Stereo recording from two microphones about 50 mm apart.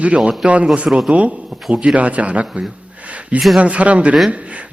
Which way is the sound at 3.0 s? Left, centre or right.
Right.